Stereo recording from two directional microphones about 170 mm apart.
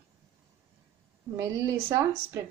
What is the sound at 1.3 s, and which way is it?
Speech, 15° right (ahead or behind).